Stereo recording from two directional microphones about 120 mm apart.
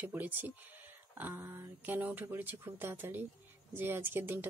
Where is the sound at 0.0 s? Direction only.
15° right (ahead or behind).